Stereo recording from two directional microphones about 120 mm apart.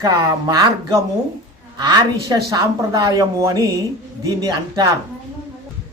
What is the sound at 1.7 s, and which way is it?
A woman's voice, 35° right (ahead or behind).